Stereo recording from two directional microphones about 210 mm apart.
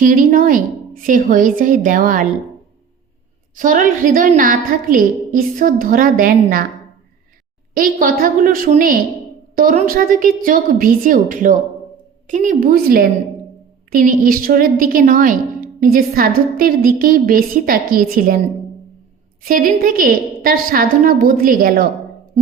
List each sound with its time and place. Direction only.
0.0 s a woman's voice: 40° right (ahead or behind)
3.5 s a woman's voice: 40° right (ahead or behind)
7.7 s a woman's voice: 40° right (ahead or behind)